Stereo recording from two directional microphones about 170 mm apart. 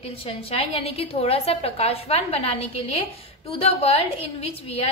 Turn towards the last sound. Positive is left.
turn(degrees=35)  # may be behind; listen again after turning